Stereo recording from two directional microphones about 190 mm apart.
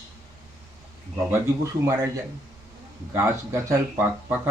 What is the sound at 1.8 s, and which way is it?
Speech, 20° right (ahead or behind).